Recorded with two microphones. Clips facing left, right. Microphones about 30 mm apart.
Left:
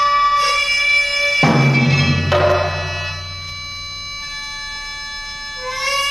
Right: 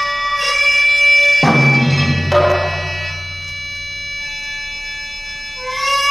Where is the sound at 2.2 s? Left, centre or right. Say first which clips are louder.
Right 3 dB; centre.